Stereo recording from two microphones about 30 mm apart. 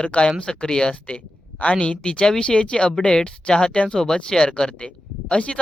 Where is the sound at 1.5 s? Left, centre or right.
Left.